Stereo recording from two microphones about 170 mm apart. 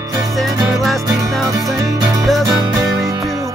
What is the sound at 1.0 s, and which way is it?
Music, 20° right (ahead or behind).